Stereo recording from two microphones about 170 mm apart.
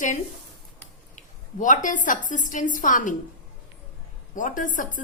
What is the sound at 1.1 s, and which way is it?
A woman's voice, 50° left (ahead or behind).